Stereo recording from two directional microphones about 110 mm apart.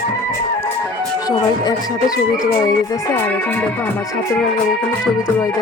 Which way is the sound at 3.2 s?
15° left (ahead or behind).